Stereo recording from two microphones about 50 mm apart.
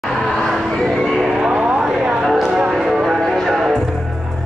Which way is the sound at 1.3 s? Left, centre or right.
Centre.